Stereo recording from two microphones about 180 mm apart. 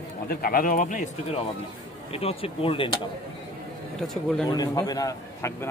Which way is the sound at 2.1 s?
35° left (ahead or behind).